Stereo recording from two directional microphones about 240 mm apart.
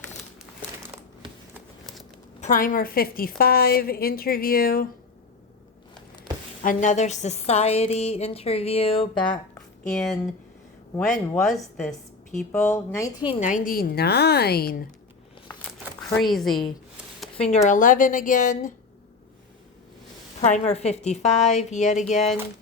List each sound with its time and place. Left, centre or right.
2.4 s a woman's voice: left
6.6 s a woman's voice: left
10.9 s a woman's voice: centre
13.4 s a woman's voice: left
16.1 s a woman's voice: centre
17.2 s a sound: centre
17.5 s a woman's voice: left
20.4 s a woman's voice: left